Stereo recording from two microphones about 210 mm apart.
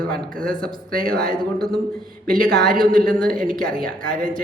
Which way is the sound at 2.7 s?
45° right (ahead or behind).